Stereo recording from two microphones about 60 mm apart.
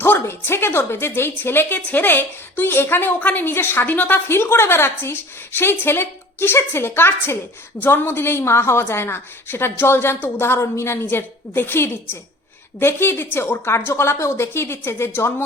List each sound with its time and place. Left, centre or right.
0.0 s a woman's voice: left
4.3 s a woman's voice: left
11.0 s a woman's voice: left